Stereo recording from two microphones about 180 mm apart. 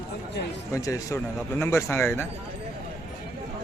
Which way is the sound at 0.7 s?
20° left (ahead or behind).